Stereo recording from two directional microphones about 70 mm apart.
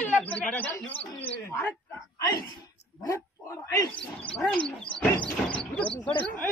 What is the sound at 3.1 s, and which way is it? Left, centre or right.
Speech, left.